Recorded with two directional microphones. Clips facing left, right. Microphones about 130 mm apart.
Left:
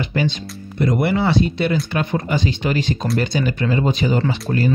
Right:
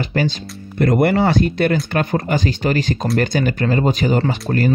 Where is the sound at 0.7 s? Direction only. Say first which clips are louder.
Right 4 dB; 55° right (ahead or behind).